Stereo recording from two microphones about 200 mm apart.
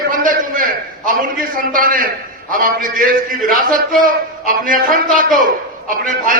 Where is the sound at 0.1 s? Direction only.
40° right (ahead or behind).